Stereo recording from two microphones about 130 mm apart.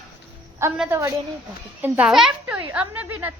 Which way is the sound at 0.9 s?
25° right (ahead or behind).